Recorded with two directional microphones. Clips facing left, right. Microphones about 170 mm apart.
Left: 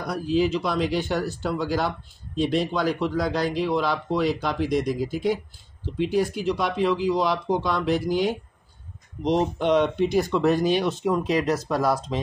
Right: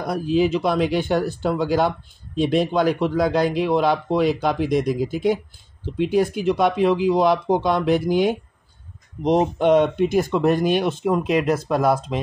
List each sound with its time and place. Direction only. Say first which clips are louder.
0.0 s a man's voice: right 3 dB; 55° right (ahead or behind)